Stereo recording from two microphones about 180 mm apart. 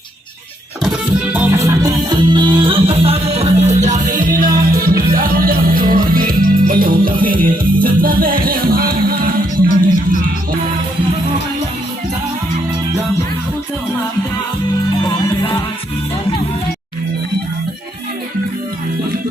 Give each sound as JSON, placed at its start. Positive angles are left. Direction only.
{"t": 0.9, "sound": "music", "side_deg": -5}